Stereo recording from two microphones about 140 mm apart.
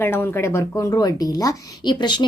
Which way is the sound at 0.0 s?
15° left (ahead or behind).